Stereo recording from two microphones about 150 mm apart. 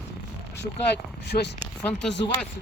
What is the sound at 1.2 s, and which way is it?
Speech, 90° left.